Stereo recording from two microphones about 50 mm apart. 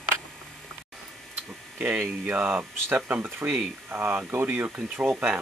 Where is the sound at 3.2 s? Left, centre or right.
Right.